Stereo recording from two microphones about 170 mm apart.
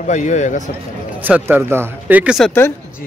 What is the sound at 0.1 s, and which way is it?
Speech, 45° left (ahead or behind).